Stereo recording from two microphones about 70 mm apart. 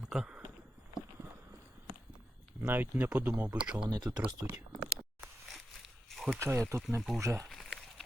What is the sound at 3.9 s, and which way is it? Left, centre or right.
Speech, right.